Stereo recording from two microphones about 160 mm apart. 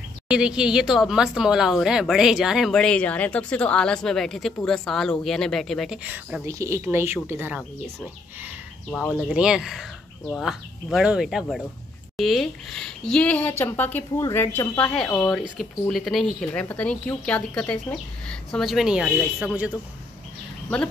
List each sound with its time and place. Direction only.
0.3 s speech: 5° right (ahead or behind)
6.0 s speech: 10° right (ahead or behind)
9.3 s speech: 5° right (ahead or behind); by 15.3 s 15° left (ahead or behind)
15.3 s speech: centre (ahead or behind)